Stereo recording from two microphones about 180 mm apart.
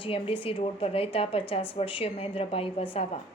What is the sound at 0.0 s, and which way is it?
A woman's voice, 30° left (ahead or behind).